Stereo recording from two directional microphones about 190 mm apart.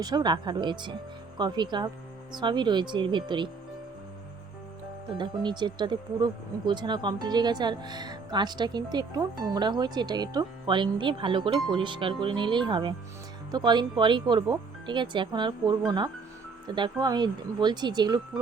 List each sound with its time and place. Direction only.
0.0 s speech: 20° right (ahead or behind)
5.1 s speech: 25° right (ahead or behind)
16.7 s speech: 25° right (ahead or behind)